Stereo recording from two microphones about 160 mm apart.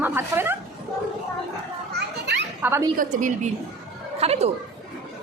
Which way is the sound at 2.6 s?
15° right (ahead or behind).